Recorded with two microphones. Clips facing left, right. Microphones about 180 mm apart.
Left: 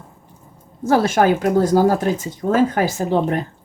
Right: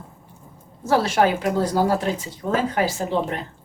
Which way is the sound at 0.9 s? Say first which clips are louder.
Left 4 dB; 50° left (ahead or behind).